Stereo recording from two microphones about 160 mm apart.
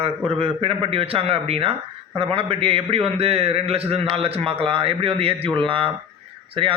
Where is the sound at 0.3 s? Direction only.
35° right (ahead or behind).